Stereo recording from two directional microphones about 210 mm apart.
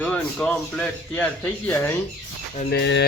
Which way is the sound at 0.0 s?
5° left (ahead or behind).